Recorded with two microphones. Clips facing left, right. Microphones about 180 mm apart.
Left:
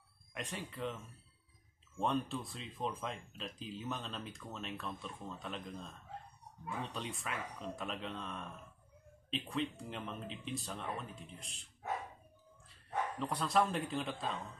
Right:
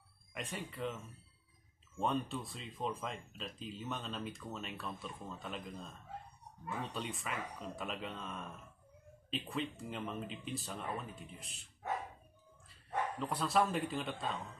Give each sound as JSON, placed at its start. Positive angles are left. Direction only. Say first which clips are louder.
{"t": 0.3, "sound": "speech", "louder": "even", "side_deg": 0}
{"t": 13.2, "sound": "speech", "louder": "even", "side_deg": 0}